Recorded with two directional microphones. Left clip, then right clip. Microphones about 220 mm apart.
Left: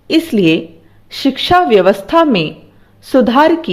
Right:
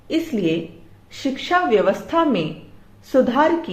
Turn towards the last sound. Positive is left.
turn(degrees=45)  # may be behind; listen again after turning